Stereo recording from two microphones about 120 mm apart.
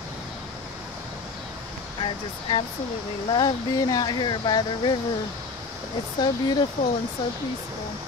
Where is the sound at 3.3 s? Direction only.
35° left (ahead or behind).